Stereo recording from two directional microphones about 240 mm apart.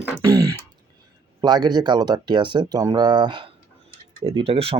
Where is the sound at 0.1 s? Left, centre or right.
Centre.